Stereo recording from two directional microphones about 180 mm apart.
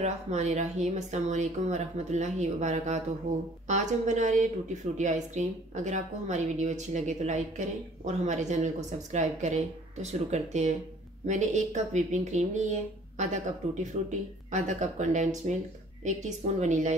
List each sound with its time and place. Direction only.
0.0 s a woman's voice: 40° right (ahead or behind)